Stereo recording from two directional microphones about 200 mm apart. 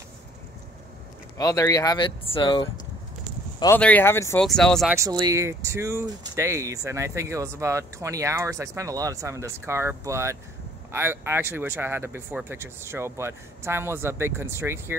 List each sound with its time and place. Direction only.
1.4 s speech: 20° left (ahead or behind)
4.9 s speech: 15° right (ahead or behind)